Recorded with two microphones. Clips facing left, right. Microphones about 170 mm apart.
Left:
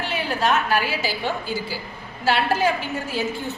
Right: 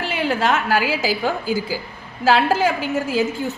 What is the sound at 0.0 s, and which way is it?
A woman's voice, 90° right.